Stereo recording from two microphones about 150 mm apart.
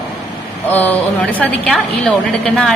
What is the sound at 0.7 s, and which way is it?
A woman's voice, 10° left (ahead or behind).